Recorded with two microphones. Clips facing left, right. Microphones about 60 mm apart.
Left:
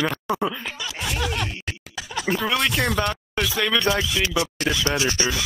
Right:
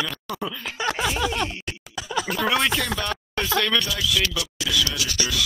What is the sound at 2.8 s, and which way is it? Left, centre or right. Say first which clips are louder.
Speech: left 4 dB; left.